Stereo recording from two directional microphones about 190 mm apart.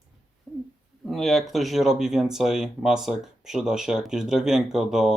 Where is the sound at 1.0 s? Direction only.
Centre (ahead or behind).